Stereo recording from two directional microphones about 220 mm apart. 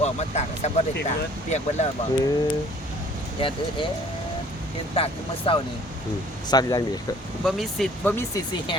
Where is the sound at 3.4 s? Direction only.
25° left (ahead or behind).